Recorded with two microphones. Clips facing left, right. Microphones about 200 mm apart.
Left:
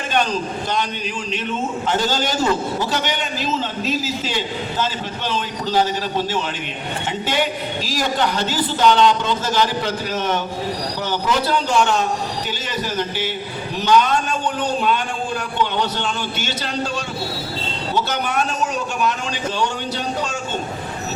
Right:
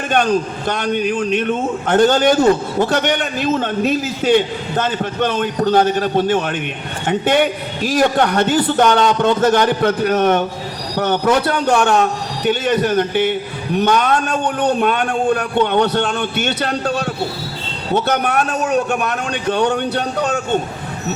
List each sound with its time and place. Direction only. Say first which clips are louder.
0.1 s a man's voice: right 5 dB; 55° right (ahead or behind)